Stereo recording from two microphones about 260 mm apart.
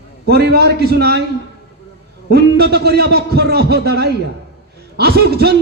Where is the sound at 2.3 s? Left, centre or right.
Right.